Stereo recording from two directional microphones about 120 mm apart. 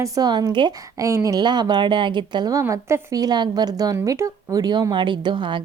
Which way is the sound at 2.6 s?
20° right (ahead or behind).